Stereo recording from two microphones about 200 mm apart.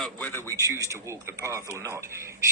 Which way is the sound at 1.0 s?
15° right (ahead or behind).